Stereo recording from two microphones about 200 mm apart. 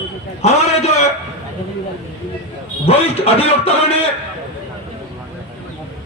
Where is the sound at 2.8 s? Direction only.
30° left (ahead or behind).